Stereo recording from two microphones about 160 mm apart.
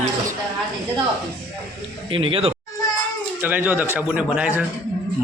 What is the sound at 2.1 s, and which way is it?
Speech, 35° right (ahead or behind).